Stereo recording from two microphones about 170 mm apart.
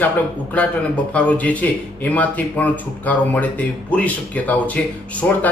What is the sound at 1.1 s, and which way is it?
Speech, 10° left (ahead or behind).